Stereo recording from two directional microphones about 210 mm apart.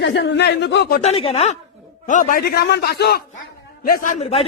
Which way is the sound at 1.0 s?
30° left (ahead or behind).